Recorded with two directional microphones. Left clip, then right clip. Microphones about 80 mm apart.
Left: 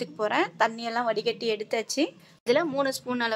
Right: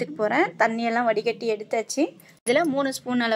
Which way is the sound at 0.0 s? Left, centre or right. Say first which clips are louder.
Right 4 dB; centre.